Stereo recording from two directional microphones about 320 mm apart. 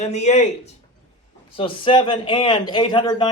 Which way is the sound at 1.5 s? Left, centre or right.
Centre.